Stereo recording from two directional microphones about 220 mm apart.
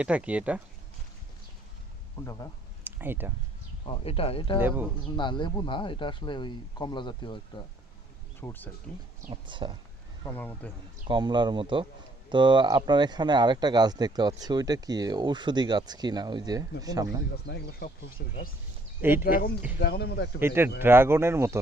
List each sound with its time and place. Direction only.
0.0 s speech: 5° right (ahead or behind)
2.8 s speech: 10° right (ahead or behind)
3.8 s speech: 25° left (ahead or behind)
8.4 s speech: 10° left (ahead or behind)
9.3 s speech: 20° right (ahead or behind)
10.2 s speech: 10° left (ahead or behind)
11.1 s speech: 20° right (ahead or behind)
17.3 s speech: 45° left (ahead or behind)
19.0 s speech: 10° right (ahead or behind)
19.8 s speech: 50° left (ahead or behind)
20.4 s speech: 10° right (ahead or behind)